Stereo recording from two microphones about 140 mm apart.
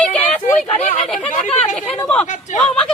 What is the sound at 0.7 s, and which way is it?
Chatter, 55° left (ahead or behind).